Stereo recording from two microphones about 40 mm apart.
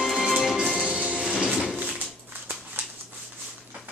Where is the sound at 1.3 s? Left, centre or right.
Centre.